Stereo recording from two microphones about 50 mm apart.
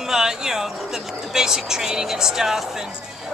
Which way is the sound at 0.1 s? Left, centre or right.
Centre.